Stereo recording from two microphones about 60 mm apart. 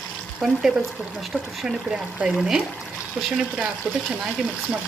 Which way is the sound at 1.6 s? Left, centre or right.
Centre.